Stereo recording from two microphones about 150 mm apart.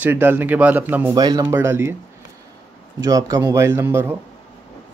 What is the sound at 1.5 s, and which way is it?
Speech, 15° right (ahead or behind).